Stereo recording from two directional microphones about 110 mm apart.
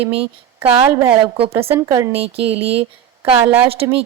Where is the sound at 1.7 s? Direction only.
30° right (ahead or behind).